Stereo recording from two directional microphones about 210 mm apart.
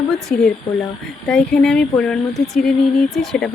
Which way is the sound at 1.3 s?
5° left (ahead or behind).